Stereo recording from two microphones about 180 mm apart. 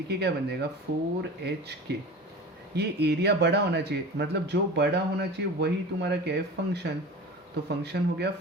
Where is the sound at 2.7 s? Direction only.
65° right (ahead or behind).